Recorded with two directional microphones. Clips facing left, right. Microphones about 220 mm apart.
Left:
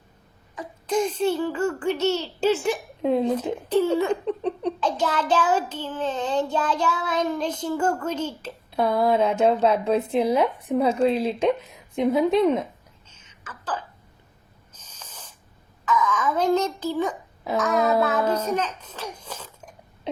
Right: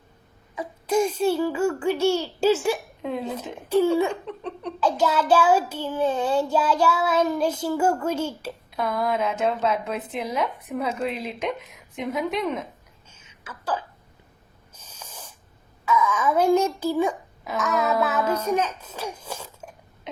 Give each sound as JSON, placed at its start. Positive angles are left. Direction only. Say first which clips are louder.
{"t": 0.5, "sound": "child singing", "louder": "right 2 dB", "side_deg": -10}
{"t": 3.0, "sound": "speech", "louder": "left 7 dB", "side_deg": 30}
{"t": 3.7, "sound": "child singing", "louder": "right 1 dB", "side_deg": -10}
{"t": 8.7, "sound": "a woman's voice", "louder": "left 5 dB", "side_deg": 30}
{"t": 13.2, "sound": "a sound", "louder": "right 3 dB", "side_deg": -10}
{"t": 14.7, "sound": "snort", "louder": "right 3 dB", "side_deg": -10}
{"t": 15.9, "sound": "child singing", "louder": "right 1 dB", "side_deg": -10}
{"t": 18.4, "sound": "a child's voice", "louder": "right 2 dB", "side_deg": -10}